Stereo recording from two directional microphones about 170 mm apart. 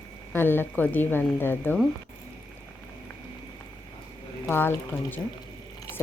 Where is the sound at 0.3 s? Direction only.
10° left (ahead or behind).